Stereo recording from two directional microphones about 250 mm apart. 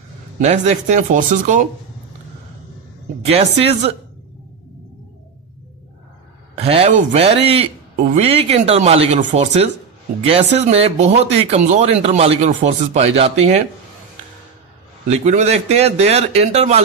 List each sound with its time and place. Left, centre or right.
0.4 s speech: right
3.3 s speech: right
6.5 s a sound: right
7.1 s speech: right
15.0 s speech: right